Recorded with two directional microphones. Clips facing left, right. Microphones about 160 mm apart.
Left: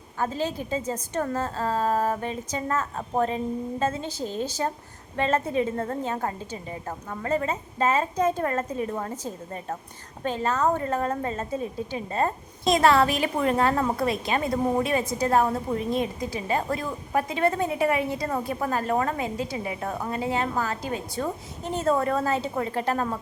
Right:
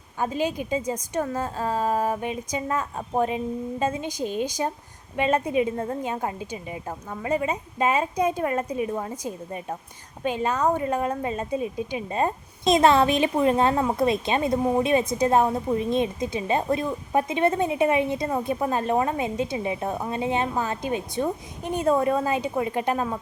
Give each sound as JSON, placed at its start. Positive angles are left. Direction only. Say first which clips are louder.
{"t": 0.2, "sound": "a woman's voice", "louder": "right 2 dB", "side_deg": -15}